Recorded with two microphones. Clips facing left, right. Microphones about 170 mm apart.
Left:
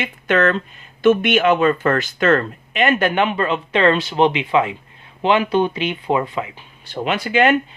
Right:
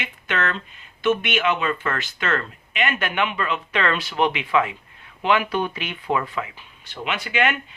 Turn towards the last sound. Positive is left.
turn(degrees=35)  # may be behind; listen again after turning